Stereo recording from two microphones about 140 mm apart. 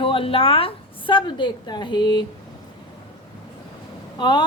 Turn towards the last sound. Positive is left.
turn(degrees=30)  # may be behind; listen again after turning